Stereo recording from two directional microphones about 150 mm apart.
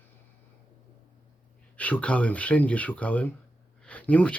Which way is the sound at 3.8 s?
10° left (ahead or behind).